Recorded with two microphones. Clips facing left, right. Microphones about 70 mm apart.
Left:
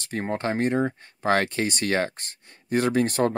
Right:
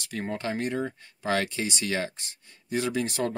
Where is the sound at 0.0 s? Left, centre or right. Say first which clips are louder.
Left 4 dB; left.